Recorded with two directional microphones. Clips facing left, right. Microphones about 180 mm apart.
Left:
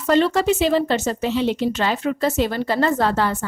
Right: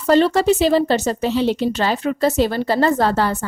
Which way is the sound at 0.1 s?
35° right (ahead or behind).